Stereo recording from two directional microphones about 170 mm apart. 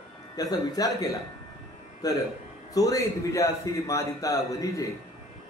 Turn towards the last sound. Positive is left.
turn(degrees=20)  # may be behind; listen again after turning